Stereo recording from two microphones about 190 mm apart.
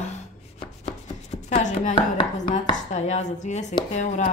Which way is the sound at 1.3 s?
40° left (ahead or behind).